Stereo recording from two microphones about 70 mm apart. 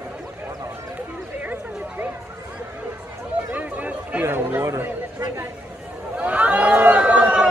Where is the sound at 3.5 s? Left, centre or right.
Right.